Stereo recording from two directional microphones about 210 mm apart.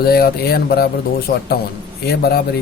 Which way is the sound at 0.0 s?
45° left (ahead or behind).